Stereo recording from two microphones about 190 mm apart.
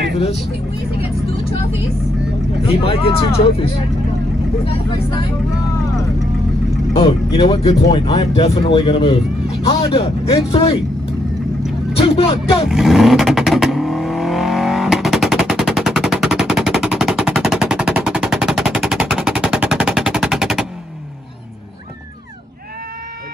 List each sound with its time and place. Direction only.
2.7 s speech: 30° left (ahead or behind)
7.0 s speech: 30° left (ahead or behind)
12.0 s speech: 30° left (ahead or behind)
12.6 s vehicle: centre (ahead or behind)